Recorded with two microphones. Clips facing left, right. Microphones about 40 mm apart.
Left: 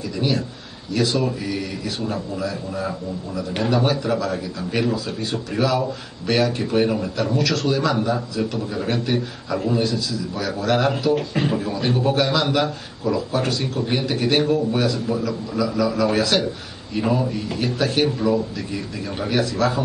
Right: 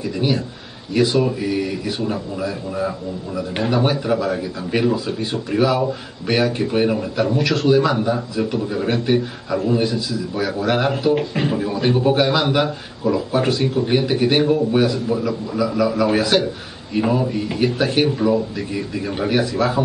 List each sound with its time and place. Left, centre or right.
0.9 s speech: centre